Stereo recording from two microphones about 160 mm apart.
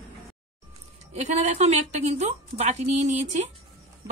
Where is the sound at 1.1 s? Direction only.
45° right (ahead or behind).